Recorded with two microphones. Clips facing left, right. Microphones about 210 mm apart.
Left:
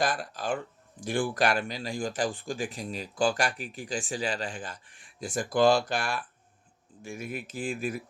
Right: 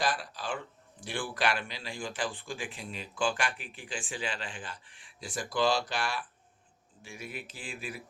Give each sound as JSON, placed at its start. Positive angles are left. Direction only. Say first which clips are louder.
{"t": 0.0, "sound": "speech", "louder": "left 3 dB", "side_deg": 45}